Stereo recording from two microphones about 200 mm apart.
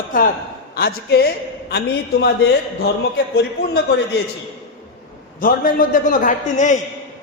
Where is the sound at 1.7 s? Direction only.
55° left (ahead or behind).